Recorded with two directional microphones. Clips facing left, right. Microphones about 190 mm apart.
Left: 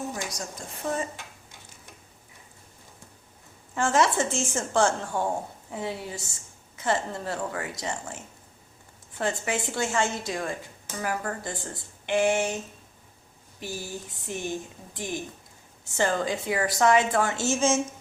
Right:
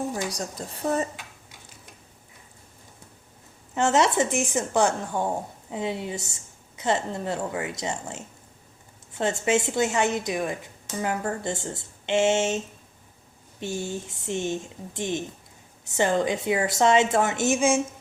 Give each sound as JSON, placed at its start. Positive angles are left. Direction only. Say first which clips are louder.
{"t": 0.1, "sound": "speech", "louder": "right 4 dB", "side_deg": -35}
{"t": 3.8, "sound": "speech", "louder": "right 2 dB", "side_deg": -20}